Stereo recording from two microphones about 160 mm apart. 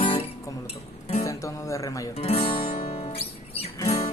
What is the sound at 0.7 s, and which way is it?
Speech, 40° left (ahead or behind).